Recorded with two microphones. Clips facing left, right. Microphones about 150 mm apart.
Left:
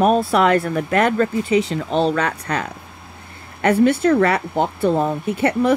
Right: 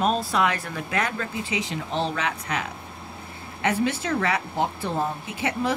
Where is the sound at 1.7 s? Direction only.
70° left (ahead or behind).